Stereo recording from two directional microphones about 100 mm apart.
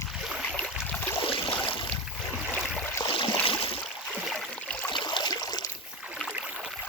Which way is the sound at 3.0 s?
55° left (ahead or behind).